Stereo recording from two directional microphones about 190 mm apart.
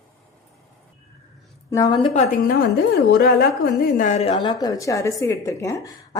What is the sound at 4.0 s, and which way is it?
Speech, 35° left (ahead or behind).